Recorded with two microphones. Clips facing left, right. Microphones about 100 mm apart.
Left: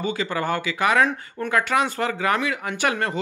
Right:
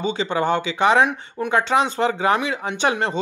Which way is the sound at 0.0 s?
25° right (ahead or behind).